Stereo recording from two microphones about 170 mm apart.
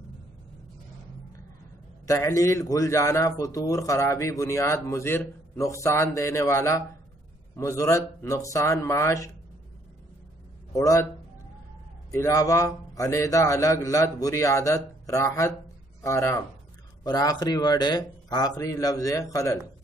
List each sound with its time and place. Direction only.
2.0 s a man's voice: 20° left (ahead or behind)
10.7 s a man's voice: 20° left (ahead or behind)
12.1 s a man's voice: 15° left (ahead or behind)